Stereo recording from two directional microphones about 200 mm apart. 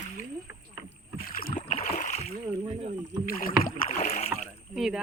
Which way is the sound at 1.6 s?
30° left (ahead or behind).